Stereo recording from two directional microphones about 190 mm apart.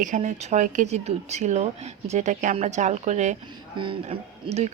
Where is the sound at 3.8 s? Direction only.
25° right (ahead or behind).